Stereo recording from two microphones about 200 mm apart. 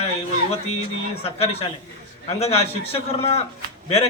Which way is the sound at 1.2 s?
30° left (ahead or behind).